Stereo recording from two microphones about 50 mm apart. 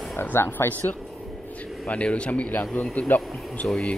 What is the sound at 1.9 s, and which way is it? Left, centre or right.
Speech, left.